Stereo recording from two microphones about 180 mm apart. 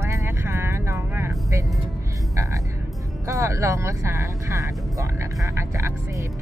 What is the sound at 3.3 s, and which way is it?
Speech, 15° right (ahead or behind).